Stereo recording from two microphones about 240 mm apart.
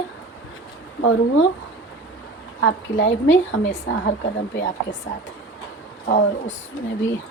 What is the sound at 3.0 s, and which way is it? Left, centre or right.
Speech, left.